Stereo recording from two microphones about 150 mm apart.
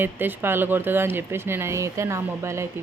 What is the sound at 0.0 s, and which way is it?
Speech, 15° right (ahead or behind).